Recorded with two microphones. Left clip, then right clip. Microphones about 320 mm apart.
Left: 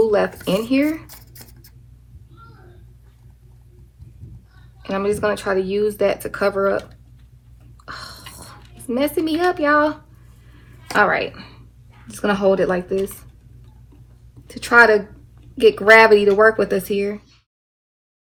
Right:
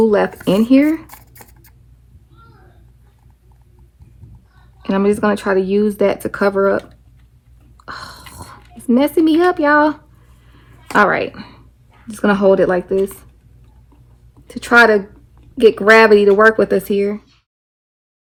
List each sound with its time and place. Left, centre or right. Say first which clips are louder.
0.4 s speech: right 6 dB; right
1.0 s a sound: right 4 dB; centre
4.8 s speech: right 4 dB; right
7.8 s a sound: right 3 dB; right
12.0 s speech: right 4 dB; right
14.4 s speech: right 2 dB; right